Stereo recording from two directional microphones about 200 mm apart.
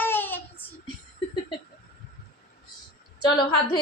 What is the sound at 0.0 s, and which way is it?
Child singing, 10° left (ahead or behind).